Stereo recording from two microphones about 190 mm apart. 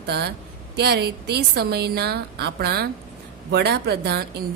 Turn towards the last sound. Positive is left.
turn(degrees=-55)  # may be behind; listen again after turning